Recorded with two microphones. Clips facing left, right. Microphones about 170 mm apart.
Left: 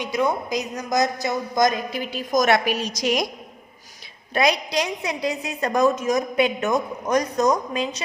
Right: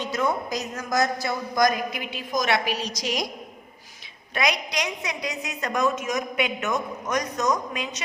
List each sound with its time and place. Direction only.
0.0 s a woman's voice: 15° left (ahead or behind); by 3.2 s 55° left (ahead or behind)
4.4 s a woman's voice: 30° left (ahead or behind)